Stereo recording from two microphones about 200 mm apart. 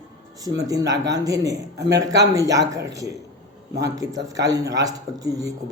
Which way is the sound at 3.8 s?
15° right (ahead or behind).